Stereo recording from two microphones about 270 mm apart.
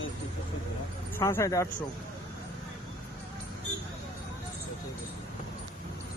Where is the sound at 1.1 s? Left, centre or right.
Centre.